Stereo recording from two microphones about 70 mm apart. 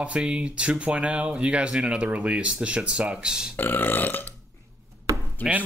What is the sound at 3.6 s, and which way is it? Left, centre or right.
Burping, left.